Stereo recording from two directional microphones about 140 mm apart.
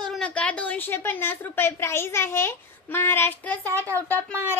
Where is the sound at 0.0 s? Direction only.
5° left (ahead or behind).